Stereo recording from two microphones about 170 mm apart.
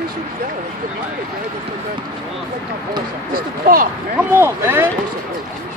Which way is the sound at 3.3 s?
55° right (ahead or behind).